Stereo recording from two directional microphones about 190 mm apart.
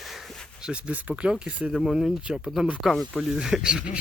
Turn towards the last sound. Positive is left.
turn(degrees=-5)  # may be behind; listen again after turning